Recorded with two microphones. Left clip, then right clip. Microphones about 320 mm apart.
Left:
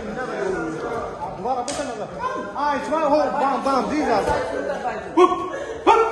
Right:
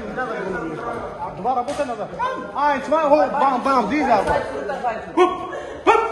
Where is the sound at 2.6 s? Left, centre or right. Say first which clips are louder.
Right 3 dB; right.